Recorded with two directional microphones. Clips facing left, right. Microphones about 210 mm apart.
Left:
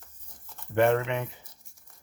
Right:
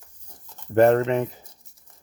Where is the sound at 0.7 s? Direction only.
40° right (ahead or behind).